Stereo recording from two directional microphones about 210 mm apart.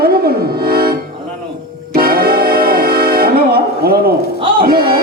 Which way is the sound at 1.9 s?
45° right (ahead or behind).